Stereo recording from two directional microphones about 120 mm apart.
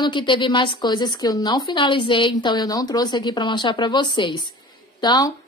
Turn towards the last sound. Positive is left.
turn(degrees=35)  # may be behind; listen again after turning